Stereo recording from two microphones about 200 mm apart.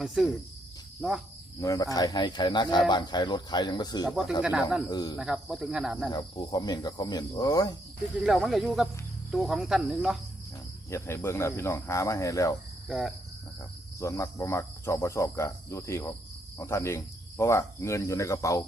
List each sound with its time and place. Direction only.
0.0 s speech: 5° right (ahead or behind)
1.6 s cricket: 15° left (ahead or behind)
4.1 s speech: centre (ahead or behind)
4.9 s cricket: 20° left (ahead or behind)
5.1 s speech: 5° right (ahead or behind)
6.1 s cricket: 20° left (ahead or behind)
8.2 s speech: centre (ahead or behind)
10.9 s cricket: 15° left (ahead or behind)
12.9 s speech: centre (ahead or behind)
14.0 s cricket: 15° left (ahead or behind)